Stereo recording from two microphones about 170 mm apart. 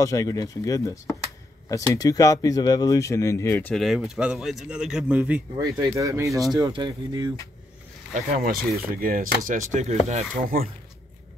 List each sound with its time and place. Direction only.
0.0 s speech: 20° left (ahead or behind); by 5.4 s 5° right (ahead or behind)
5.6 s speech: 20° right (ahead or behind)
8.1 s speech: 55° right (ahead or behind)